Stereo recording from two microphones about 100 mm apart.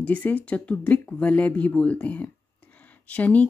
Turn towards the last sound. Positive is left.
turn(degrees=15)  # may be behind; listen again after turning